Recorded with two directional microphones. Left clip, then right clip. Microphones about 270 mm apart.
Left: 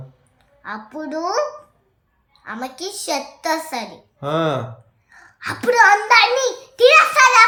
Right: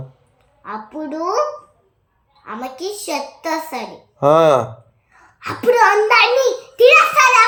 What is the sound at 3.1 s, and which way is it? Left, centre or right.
Speech, centre.